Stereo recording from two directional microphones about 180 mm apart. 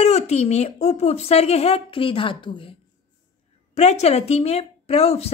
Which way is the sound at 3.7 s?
35° left (ahead or behind).